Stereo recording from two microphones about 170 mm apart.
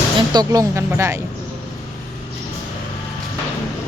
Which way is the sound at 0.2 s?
20° right (ahead or behind).